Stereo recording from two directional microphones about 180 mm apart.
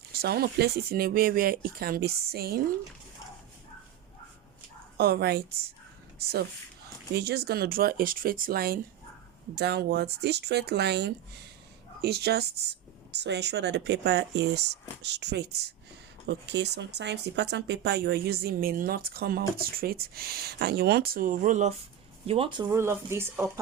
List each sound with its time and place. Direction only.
0.1 s speech: 60° right (ahead or behind)
4.9 s speech: 60° right (ahead or behind)
7.2 s speech: 65° right (ahead or behind)
9.6 s speech: 65° right (ahead or behind); by 21.7 s 45° right (ahead or behind)
22.3 s speech: 30° right (ahead or behind)
22.7 s speech: 15° right (ahead or behind)